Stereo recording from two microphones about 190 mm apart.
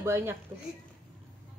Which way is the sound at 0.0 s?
15° right (ahead or behind).